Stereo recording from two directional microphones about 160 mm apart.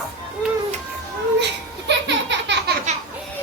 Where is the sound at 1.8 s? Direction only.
90° right.